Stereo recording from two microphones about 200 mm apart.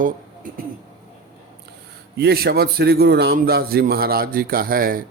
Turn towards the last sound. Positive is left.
turn(degrees=-45)  # may be behind; listen again after turning